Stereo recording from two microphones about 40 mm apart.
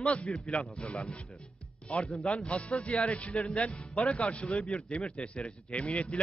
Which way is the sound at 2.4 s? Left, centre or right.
Left.